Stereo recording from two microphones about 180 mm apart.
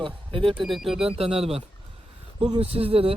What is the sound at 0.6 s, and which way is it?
Speech, centre (ahead or behind).